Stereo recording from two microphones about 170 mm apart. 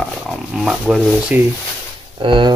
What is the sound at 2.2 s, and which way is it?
Speech, 30° right (ahead or behind).